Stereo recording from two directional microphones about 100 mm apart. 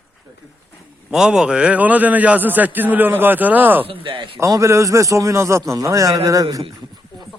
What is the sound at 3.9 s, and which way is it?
Speech, 55° right (ahead or behind).